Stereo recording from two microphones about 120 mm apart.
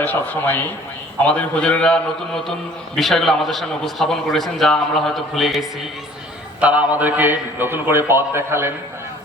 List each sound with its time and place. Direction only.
0.0 s a man's voice: 15° left (ahead or behind)
6.6 s a man's voice: 10° right (ahead or behind)